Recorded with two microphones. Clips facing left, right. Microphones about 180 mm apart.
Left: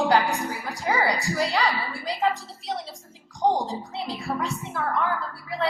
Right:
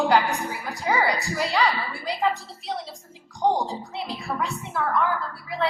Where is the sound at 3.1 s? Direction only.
35° left (ahead or behind).